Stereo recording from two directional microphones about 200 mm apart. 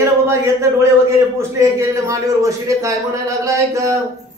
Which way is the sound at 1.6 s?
15° right (ahead or behind).